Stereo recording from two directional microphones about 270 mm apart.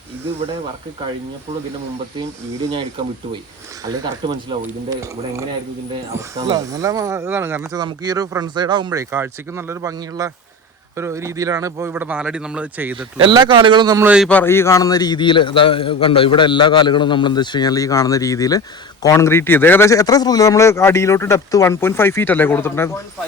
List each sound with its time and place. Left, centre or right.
3.8 s a man's voice: centre